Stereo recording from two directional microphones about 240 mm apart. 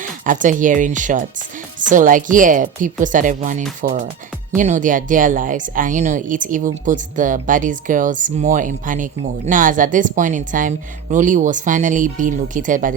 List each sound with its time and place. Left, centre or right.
0.0 s speech: right